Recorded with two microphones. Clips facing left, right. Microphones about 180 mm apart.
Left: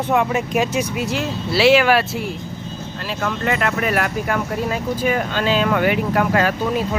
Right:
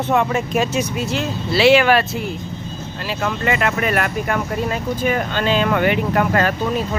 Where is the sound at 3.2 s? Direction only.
5° right (ahead or behind).